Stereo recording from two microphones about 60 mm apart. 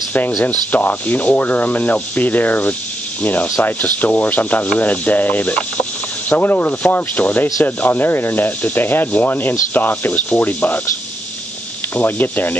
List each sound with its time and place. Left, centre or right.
0.4 s rub: left
3.2 s speech: left
3.6 s rub: left
11.9 s rub: left